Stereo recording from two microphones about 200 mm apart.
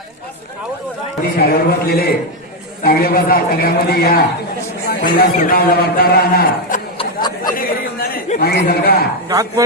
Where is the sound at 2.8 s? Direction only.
50° left (ahead or behind).